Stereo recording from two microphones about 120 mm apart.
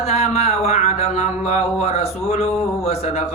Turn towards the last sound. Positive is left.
turn(degrees=60)  # may be behind; listen again after turning